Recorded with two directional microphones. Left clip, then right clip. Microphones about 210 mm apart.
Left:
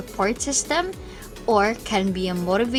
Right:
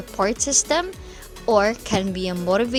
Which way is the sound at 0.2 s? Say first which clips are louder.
Right 3 dB; 35° right (ahead or behind).